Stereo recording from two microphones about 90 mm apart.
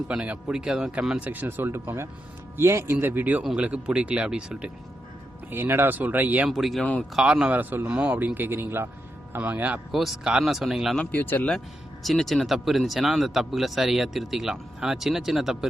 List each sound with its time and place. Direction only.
0.1 s speech: 15° right (ahead or behind)
1.3 s speech: 20° right (ahead or behind)
5.5 s speech: 25° right (ahead or behind)
6.5 s speech: centre (ahead or behind)
7.6 s speech: 25° right (ahead or behind)
7.9 s speech: 10° right (ahead or behind)
9.9 s speech: 5° right (ahead or behind)
10.9 s speech: 15° left (ahead or behind)
12.0 s speech: centre (ahead or behind)